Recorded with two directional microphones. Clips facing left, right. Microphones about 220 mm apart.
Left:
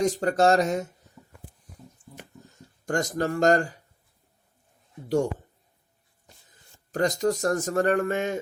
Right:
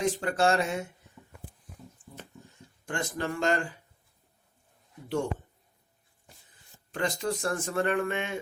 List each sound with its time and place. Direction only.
0.0 s speech: 40° left (ahead or behind)
2.8 s speech: 40° left (ahead or behind)
5.0 s speech: 40° left (ahead or behind)
6.9 s speech: 40° left (ahead or behind)